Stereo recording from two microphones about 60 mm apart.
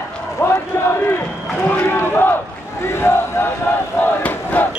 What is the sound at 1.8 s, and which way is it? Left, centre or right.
Battle cry, left.